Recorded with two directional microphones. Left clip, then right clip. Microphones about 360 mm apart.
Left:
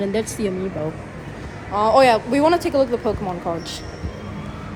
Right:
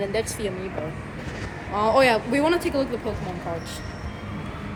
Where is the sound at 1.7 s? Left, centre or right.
Centre.